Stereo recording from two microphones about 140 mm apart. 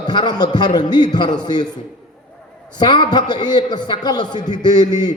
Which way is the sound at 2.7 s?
30° left (ahead or behind).